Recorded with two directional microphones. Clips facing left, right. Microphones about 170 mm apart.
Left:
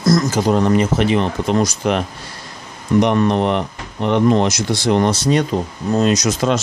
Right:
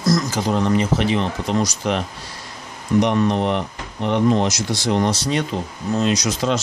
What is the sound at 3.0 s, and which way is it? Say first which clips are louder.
Speech: left 3 dB; 60° left (ahead or behind).